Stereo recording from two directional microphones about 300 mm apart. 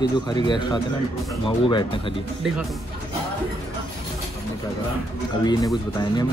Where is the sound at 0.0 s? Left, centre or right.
Centre.